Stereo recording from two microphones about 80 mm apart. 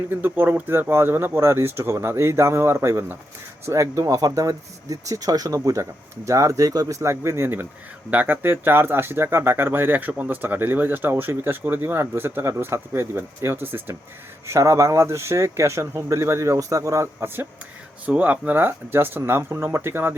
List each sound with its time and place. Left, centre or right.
0.1 s speech: right
14.4 s speech: right